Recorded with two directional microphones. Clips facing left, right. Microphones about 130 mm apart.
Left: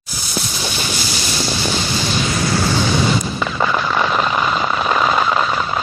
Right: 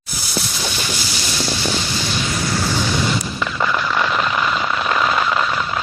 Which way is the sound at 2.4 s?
90° left.